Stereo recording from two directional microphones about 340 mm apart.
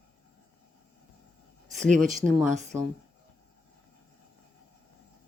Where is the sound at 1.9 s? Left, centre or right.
Right.